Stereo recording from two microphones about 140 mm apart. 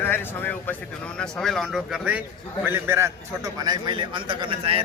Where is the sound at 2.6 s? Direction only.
15° right (ahead or behind).